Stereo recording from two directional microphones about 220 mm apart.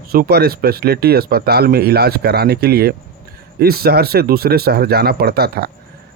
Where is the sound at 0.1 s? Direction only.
45° right (ahead or behind).